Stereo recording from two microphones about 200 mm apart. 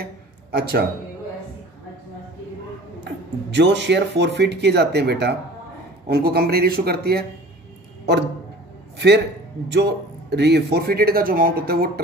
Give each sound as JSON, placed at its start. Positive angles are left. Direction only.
{"t": 0.0, "sound": "a sound", "side_deg": -50}
{"t": 3.5, "sound": "a man's voice", "side_deg": -60}
{"t": 8.9, "sound": "a man's voice", "side_deg": -55}